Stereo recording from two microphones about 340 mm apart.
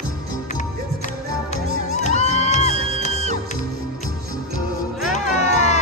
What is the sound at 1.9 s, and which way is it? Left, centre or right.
Music, centre.